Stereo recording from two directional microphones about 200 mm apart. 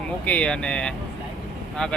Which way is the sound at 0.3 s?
5° left (ahead or behind).